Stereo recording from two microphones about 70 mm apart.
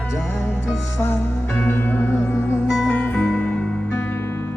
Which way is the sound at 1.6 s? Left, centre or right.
Left.